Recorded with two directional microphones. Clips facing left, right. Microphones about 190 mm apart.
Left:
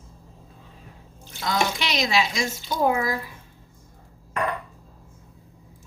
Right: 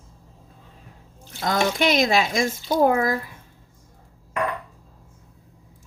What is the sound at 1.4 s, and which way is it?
Speech, 50° right (ahead or behind).